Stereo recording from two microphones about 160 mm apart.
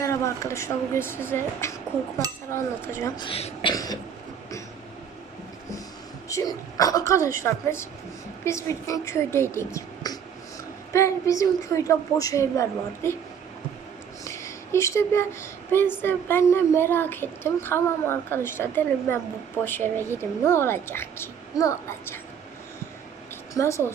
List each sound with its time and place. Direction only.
0.0 s speech: 20° left (ahead or behind)
3.2 s speech: 35° left (ahead or behind)
3.7 s a woman's voice: 25° left (ahead or behind)
6.2 s a woman's voice: 20° left (ahead or behind)
14.3 s speech: 20° left (ahead or behind)
23.6 s speech: 20° left (ahead or behind)